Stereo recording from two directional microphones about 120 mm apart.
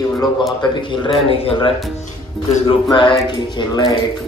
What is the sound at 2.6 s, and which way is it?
Speech, 40° left (ahead or behind).